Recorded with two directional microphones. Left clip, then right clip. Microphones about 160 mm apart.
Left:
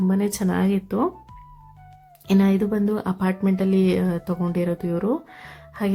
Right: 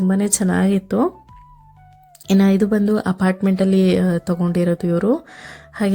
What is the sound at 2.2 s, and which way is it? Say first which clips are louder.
Speech: right 4 dB; 25° right (ahead or behind).